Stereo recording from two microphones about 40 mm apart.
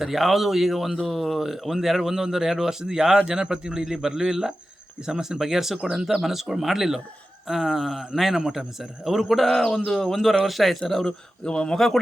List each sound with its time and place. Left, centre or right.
0.0 s a man's voice: centre
3.2 s speech: right
6.1 s a man's voice: centre
9.3 s a man's voice: centre
11.4 s speech: left